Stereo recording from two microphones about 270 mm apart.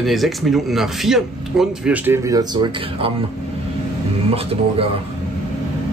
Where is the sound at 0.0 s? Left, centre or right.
Centre.